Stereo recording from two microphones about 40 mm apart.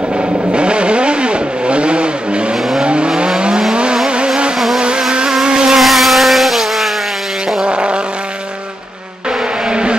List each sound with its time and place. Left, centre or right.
0.5 s vehicle: right
5.8 s vehicle: centre
7.6 s vehicle: right
9.7 s vehicle: right